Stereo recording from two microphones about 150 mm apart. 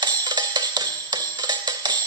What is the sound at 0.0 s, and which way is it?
Music, 30° right (ahead or behind).